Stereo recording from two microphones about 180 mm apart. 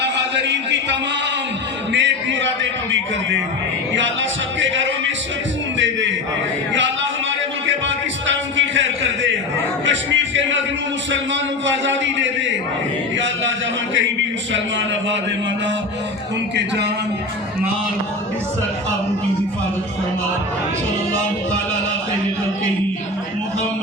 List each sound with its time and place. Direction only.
0.0 s a man's voice: 75° right (ahead or behind)
1.9 s music: 85° right
3.9 s music: 90° right
5.7 s a man's voice: 90° right
7.7 s a sound: 90° right
9.8 s music: 90° right
11.6 s music: 90° right